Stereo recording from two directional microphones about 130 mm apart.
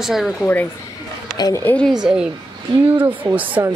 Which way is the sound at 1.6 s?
10° left (ahead or behind).